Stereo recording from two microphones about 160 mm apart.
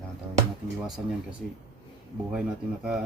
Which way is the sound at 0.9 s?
5° right (ahead or behind).